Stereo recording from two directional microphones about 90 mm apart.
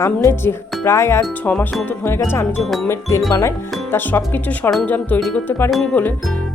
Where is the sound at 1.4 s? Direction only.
20° left (ahead or behind).